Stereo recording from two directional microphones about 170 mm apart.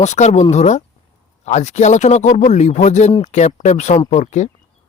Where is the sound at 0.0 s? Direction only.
40° left (ahead or behind).